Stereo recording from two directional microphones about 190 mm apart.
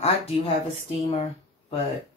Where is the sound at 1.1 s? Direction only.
30° left (ahead or behind).